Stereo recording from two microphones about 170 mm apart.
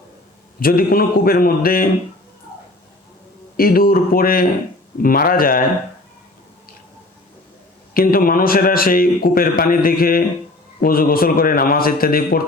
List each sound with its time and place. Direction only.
0.6 s a man's voice: 60° left (ahead or behind)
3.6 s a man's voice: 60° left (ahead or behind)
7.9 s a man's voice: 55° left (ahead or behind)